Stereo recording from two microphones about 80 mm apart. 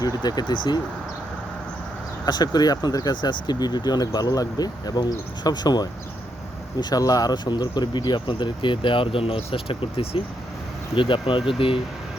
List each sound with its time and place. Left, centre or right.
0.2 s speech: left
2.2 s speech: left
10.1 s speech: left